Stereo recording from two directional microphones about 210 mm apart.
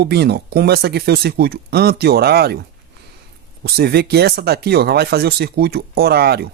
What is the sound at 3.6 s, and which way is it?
Speech, 50° right (ahead or behind).